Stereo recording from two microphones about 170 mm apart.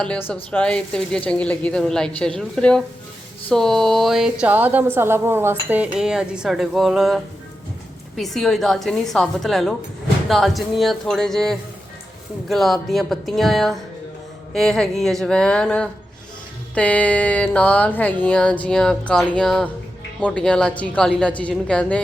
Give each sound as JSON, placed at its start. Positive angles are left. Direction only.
{"t": 0.5, "sound": "a woman's voice", "side_deg": 5}
{"t": 16.7, "sound": "a sound", "side_deg": 5}
{"t": 20.2, "sound": "a woman's voice", "side_deg": 5}